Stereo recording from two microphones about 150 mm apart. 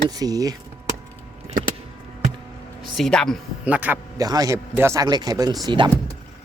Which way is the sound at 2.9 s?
5° left (ahead or behind).